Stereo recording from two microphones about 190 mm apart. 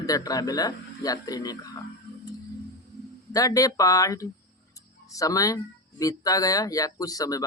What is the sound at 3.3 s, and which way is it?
Speech, 20° left (ahead or behind).